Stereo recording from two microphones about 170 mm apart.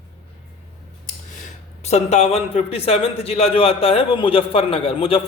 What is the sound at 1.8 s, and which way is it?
A man's voice, 40° left (ahead or behind).